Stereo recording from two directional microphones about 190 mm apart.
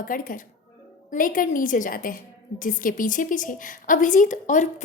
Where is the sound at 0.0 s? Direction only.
45° left (ahead or behind).